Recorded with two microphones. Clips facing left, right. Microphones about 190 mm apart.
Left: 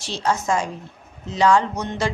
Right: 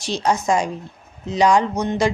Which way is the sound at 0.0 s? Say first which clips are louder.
Right 3 dB; 15° right (ahead or behind).